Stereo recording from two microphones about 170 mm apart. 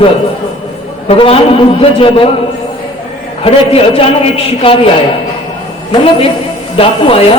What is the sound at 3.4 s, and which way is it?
A man's voice, 35° left (ahead or behind).